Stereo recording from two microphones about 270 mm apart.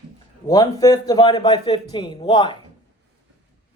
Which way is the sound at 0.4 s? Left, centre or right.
Centre.